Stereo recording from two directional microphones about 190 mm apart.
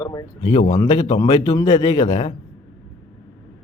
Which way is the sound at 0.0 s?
20° left (ahead or behind).